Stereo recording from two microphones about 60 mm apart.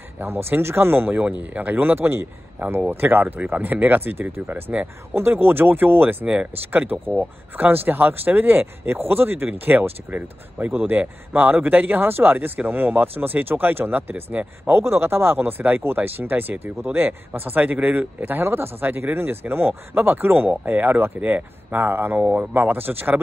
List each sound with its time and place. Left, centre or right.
0.2 s speech: right
6.2 s speech: right
6.6 s speech: right
14.7 s speech: right